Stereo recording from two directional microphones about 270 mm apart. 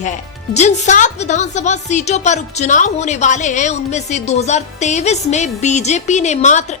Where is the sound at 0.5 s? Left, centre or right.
Left.